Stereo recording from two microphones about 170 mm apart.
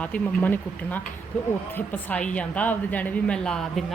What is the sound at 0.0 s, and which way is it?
A woman's voice, 10° left (ahead or behind).